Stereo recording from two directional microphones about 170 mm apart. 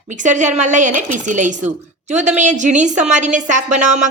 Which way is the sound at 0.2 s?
45° right (ahead or behind).